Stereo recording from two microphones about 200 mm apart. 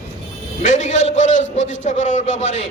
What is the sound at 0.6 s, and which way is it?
A man's voice, 35° left (ahead or behind).